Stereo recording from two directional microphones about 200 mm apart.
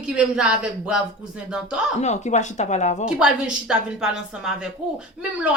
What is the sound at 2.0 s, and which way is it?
Speech, 35° left (ahead or behind).